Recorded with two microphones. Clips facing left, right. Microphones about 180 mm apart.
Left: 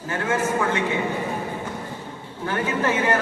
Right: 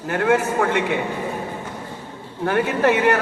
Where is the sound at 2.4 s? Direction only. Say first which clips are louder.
Right 5 dB; 65° right (ahead or behind).